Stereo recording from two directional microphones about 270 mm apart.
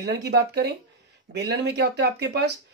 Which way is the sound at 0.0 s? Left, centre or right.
Right.